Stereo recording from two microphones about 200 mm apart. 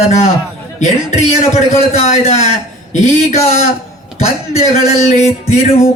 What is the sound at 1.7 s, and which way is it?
Speech, 30° left (ahead or behind).